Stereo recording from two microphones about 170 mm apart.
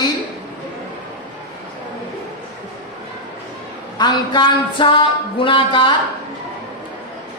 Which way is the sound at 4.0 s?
25° left (ahead or behind).